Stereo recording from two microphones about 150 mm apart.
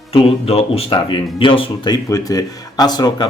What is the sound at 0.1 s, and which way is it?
Speech, 40° left (ahead or behind).